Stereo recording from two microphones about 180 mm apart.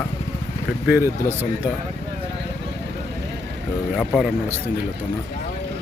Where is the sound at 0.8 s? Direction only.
10° right (ahead or behind).